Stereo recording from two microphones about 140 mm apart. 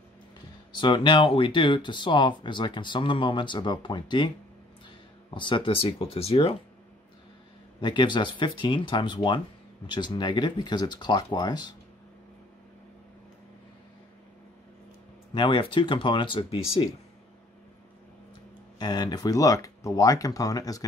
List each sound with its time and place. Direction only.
0.7 s speech: 35° left (ahead or behind)
5.3 s speech: 35° left (ahead or behind)
7.8 s speech: 35° left (ahead or behind)
15.3 s speech: 35° left (ahead or behind)
18.8 s speech: 30° left (ahead or behind)